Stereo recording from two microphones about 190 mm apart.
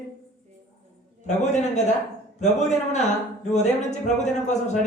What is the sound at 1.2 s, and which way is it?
A man's voice, 35° left (ahead or behind).